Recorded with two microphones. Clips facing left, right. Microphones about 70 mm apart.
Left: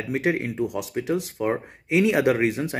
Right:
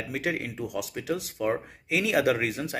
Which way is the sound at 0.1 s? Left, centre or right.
Left.